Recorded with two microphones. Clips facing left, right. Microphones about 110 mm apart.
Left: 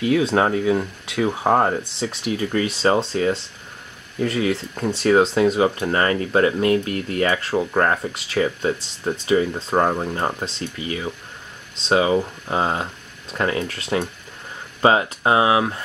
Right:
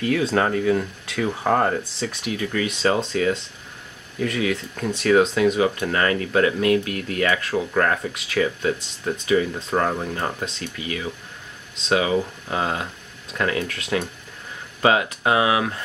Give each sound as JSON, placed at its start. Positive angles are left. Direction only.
{"t": 0.0, "sound": "speech", "side_deg": 25}